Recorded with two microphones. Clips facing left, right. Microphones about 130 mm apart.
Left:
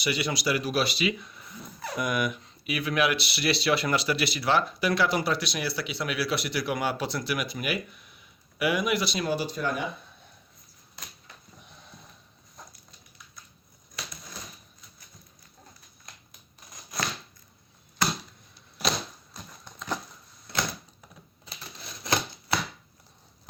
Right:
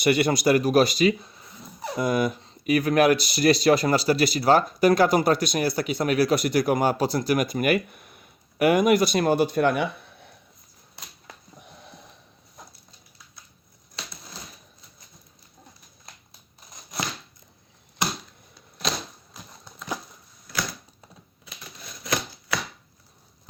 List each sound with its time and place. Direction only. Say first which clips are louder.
0.0 s speech: right 8 dB; 50° right (ahead or behind)
18.8 s typewriter: even; centre (ahead or behind)
19.6 s clip-clop: even; 10° right (ahead or behind)